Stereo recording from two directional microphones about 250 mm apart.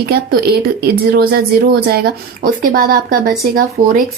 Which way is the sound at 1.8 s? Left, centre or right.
Right.